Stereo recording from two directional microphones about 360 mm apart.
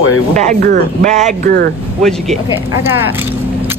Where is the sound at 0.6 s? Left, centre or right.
Right.